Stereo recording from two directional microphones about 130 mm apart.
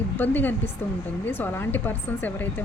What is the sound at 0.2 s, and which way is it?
A woman's voice, 15° left (ahead or behind).